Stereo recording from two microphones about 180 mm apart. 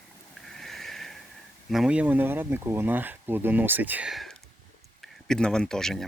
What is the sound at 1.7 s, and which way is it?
Speech, 5° right (ahead or behind).